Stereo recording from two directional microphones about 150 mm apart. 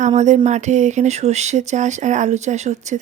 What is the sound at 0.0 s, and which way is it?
Speech, 50° right (ahead or behind).